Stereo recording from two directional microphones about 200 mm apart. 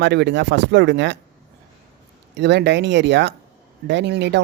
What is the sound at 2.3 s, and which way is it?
Speech, 60° right (ahead or behind).